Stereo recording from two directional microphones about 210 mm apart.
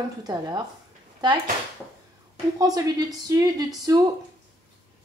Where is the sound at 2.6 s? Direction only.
15° right (ahead or behind).